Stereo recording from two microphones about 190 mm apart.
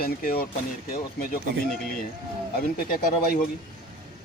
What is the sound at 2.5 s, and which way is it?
Speech, 50° left (ahead or behind).